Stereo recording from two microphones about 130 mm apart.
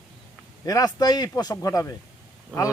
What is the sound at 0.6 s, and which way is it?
Speech, 25° left (ahead or behind).